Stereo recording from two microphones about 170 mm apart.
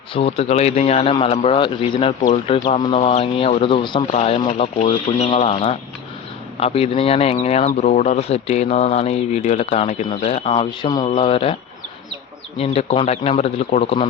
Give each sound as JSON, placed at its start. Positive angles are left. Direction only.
{"t": 0.1, "sound": "speech", "side_deg": 35}
{"t": 12.5, "sound": "speech", "side_deg": 35}